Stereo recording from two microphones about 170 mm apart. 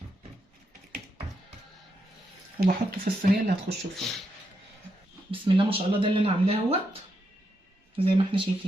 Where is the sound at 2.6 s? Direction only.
60° right (ahead or behind).